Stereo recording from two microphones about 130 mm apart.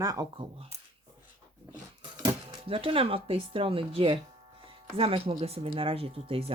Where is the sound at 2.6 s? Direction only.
45° right (ahead or behind).